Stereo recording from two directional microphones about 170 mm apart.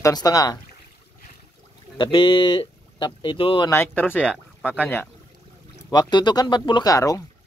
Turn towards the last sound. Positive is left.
turn(degrees=20)  # may be behind; listen again after turning